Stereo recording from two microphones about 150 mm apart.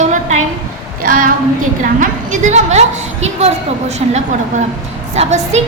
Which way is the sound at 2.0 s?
55° right (ahead or behind).